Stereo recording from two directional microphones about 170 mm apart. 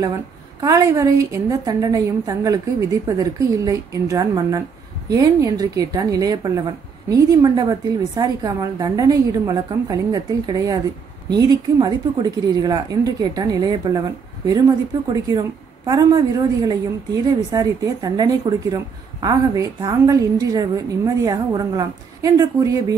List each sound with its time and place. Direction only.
0.6 s a woman's voice: 20° right (ahead or behind)